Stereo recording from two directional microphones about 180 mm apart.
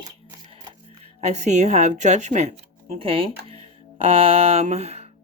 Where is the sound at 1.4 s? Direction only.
40° right (ahead or behind).